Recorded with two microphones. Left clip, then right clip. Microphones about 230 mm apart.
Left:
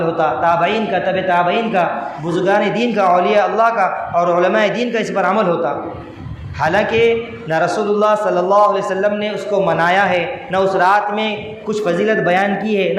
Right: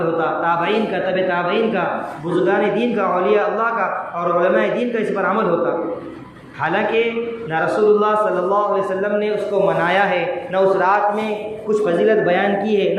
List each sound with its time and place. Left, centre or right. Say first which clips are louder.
0.2 s a man's voice: left 4 dB; left
6.6 s a man's voice: left 4 dB; left